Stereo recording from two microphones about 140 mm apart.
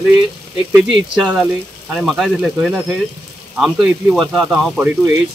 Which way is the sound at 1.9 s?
Centre (ahead or behind).